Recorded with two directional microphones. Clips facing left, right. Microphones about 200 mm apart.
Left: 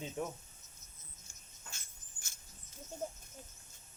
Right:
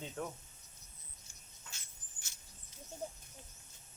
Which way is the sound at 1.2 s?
50° left (ahead or behind).